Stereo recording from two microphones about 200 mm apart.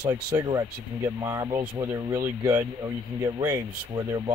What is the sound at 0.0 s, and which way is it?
Speech, 15° right (ahead or behind).